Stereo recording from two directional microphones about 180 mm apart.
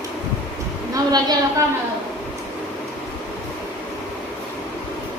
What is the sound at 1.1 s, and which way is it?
Speech, 20° right (ahead or behind).